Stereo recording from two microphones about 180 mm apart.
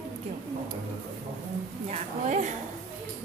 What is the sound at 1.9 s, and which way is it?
Speech, 40° right (ahead or behind).